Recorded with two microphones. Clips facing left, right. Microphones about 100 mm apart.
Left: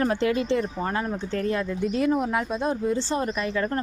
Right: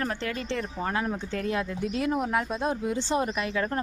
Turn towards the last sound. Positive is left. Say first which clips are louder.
# left 2 dB
turn(degrees=-5)  # may be behind; listen again after turning